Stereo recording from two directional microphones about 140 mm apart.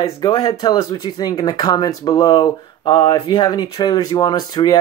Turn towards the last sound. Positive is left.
turn(degrees=30)  # may be behind; listen again after turning